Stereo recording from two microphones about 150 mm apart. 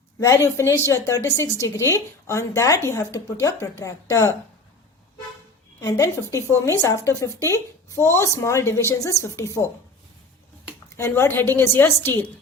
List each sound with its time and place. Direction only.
0.2 s speech: 20° left (ahead or behind)
5.8 s speech: 20° left (ahead or behind)
10.9 s a woman's voice: 15° left (ahead or behind)